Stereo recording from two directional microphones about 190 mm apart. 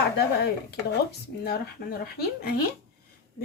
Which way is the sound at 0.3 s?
60° left (ahead or behind).